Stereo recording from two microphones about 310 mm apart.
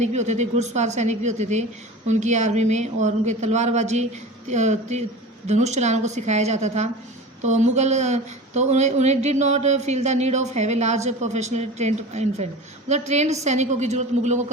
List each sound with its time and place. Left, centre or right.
0.0 s speech: right